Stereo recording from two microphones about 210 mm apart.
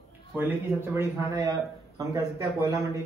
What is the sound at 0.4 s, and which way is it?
A man's voice, 10° right (ahead or behind).